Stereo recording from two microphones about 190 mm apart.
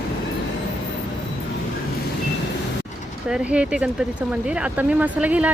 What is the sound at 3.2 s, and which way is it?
Speech, 5° right (ahead or behind).